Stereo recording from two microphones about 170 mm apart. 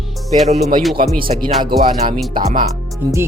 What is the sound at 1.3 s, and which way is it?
Music, 40° right (ahead or behind).